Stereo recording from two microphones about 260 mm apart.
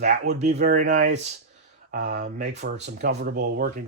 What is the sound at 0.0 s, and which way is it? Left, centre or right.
Speech, right.